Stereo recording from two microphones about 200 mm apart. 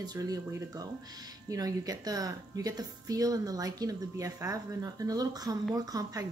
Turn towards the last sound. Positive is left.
turn(degrees=-15)  # may be behind; listen again after turning